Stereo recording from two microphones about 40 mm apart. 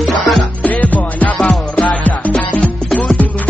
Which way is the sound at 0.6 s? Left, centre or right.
Left.